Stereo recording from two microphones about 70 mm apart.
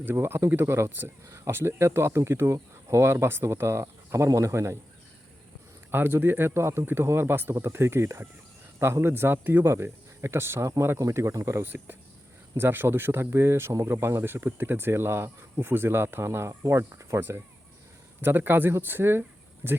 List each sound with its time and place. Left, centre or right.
0.0 s speech: right
5.9 s speech: right